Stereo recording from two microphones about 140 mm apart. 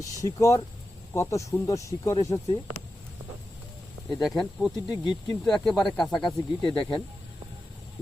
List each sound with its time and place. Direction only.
0.0 s speech: 25° left (ahead or behind)
4.1 s speech: centre (ahead or behind)
4.9 s speech: 30° left (ahead or behind)
5.5 s speech: 5° left (ahead or behind)